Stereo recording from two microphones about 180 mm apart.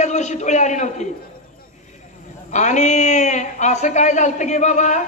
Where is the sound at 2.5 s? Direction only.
40° left (ahead or behind).